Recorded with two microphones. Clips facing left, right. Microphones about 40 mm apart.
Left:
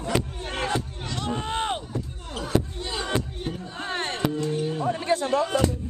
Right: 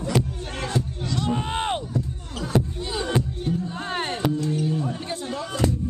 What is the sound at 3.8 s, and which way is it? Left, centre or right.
Music, centre.